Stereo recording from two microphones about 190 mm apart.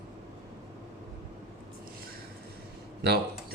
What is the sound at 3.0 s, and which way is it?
Speech, 60° right (ahead or behind).